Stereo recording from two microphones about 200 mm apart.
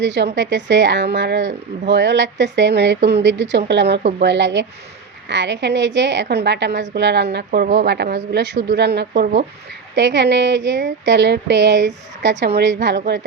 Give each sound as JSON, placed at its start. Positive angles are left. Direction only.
{"t": 0.0, "sound": "speech", "side_deg": -60}